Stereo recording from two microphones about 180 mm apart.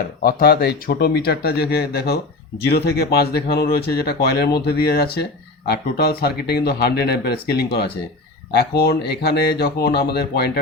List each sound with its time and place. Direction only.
0.2 s speech: 55° left (ahead or behind)